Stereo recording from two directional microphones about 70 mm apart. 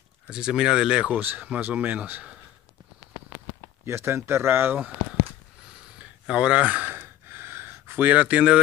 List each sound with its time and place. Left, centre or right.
0.3 s speech: centre
1.1 s speech: right
3.8 s speech: right
5.9 s a sound: centre
7.0 s gasp: right